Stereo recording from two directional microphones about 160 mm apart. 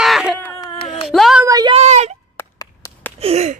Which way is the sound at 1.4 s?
25° right (ahead or behind).